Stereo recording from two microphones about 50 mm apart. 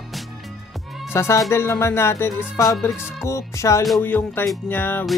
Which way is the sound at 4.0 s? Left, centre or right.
Left.